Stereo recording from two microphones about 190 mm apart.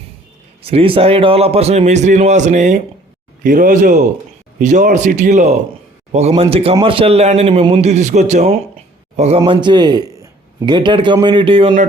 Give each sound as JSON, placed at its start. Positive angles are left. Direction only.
{"t": 0.6, "sound": "a man's voice", "side_deg": -30}
{"t": 9.4, "sound": "speech", "side_deg": -25}